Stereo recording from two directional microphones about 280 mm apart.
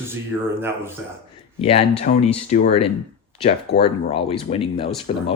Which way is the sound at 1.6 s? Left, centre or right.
Centre.